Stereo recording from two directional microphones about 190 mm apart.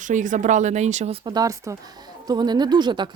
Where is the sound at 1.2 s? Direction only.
20° right (ahead or behind).